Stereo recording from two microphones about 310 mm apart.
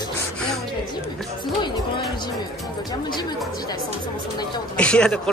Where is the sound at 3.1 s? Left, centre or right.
Centre.